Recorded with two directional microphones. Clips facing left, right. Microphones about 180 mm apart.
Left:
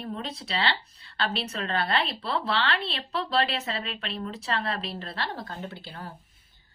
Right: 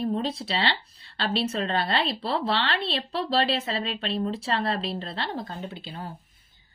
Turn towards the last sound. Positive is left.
turn(degrees=-15)  # may be behind; listen again after turning